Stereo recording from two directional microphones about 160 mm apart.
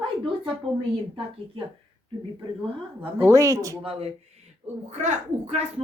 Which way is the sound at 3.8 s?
35° right (ahead or behind).